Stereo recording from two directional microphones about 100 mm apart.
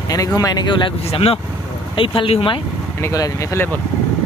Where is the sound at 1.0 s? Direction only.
80° left.